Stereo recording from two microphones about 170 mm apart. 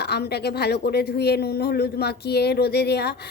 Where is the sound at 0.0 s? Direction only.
75° left (ahead or behind).